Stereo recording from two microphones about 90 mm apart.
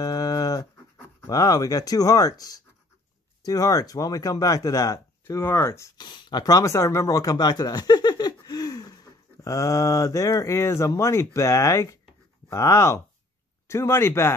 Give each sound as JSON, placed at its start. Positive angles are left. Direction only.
{"t": 0.0, "sound": "dog", "side_deg": 45}
{"t": 1.2, "sound": "speech", "side_deg": 45}
{"t": 5.3, "sound": "speech", "side_deg": 25}
{"t": 5.9, "sound": "speech", "side_deg": 50}